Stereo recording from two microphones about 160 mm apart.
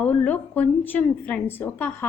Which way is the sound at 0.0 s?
10° left (ahead or behind).